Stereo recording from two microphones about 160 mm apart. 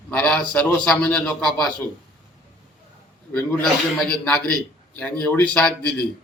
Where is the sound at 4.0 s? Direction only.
5° left (ahead or behind).